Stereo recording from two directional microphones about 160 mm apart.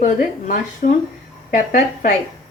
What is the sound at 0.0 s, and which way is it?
Speech, 55° left (ahead or behind).